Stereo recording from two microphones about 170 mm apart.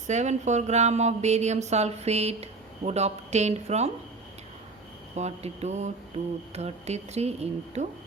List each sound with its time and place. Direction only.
0.1 s speech: 45° right (ahead or behind)
5.1 s speech: 40° right (ahead or behind)